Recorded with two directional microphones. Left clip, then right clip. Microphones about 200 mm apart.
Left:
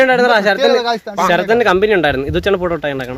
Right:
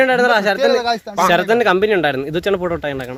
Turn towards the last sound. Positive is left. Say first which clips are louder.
# left 3 dB
turn(degrees=-5)  # may be behind; listen again after turning